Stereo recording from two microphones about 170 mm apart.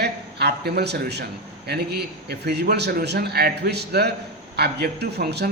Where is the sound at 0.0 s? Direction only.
75° right (ahead or behind).